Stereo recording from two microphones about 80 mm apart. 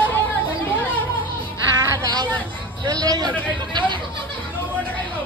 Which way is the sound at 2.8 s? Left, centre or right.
Right.